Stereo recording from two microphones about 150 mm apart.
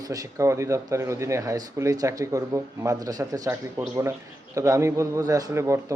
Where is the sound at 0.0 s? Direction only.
25° right (ahead or behind).